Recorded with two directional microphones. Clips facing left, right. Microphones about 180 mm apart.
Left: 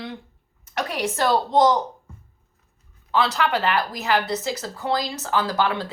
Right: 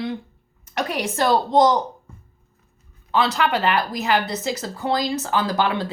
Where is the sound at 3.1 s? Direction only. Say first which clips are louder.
Right 1 dB; 20° right (ahead or behind).